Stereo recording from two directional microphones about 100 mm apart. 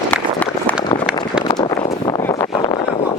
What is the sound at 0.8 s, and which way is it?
Run, 65° left (ahead or behind).